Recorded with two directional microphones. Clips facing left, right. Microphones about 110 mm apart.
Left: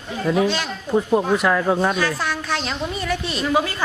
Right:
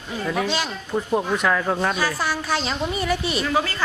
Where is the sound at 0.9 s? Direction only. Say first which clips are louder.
Left 4 dB; 5° left (ahead or behind).